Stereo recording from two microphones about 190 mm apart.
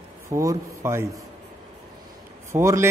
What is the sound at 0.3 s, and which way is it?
Speech, 15° right (ahead or behind).